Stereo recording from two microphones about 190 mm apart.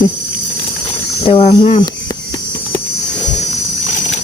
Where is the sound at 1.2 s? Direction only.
30° left (ahead or behind).